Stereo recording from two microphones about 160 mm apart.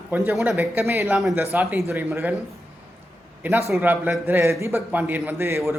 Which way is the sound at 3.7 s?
10° right (ahead or behind).